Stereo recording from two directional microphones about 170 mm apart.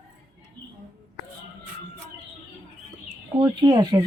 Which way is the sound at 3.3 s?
25° right (ahead or behind).